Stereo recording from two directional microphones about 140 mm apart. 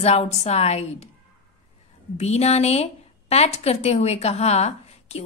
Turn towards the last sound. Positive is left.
turn(degrees=50)  # may be behind; listen again after turning